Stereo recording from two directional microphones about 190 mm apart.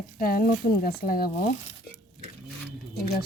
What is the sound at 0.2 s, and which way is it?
A woman's voice, 50° left (ahead or behind).